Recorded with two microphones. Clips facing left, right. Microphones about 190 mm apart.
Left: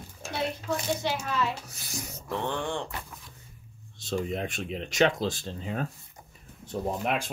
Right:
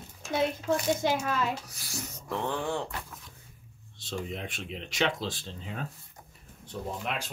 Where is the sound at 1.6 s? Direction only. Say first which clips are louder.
Left 1 dB; 20° left (ahead or behind).